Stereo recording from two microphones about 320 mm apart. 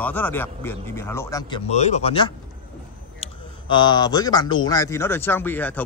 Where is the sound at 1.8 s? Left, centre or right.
Left.